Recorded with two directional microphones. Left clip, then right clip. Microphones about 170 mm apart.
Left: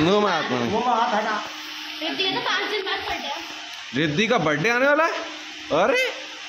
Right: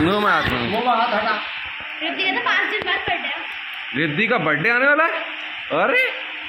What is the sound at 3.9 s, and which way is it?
A man's voice, 20° left (ahead or behind).